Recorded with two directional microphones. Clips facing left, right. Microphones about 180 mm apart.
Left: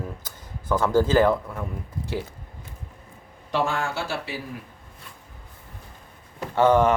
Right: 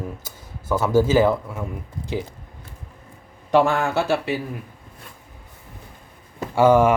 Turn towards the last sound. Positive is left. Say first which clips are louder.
# right 3 dB
turn(degrees=-10)  # may be behind; listen again after turning